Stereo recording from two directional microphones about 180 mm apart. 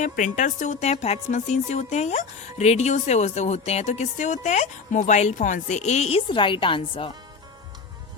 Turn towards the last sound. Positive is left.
turn(degrees=30)  # may be behind; listen again after turning